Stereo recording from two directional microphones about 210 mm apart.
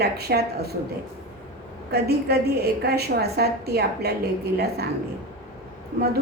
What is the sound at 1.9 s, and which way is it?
A woman's voice, 50° right (ahead or behind).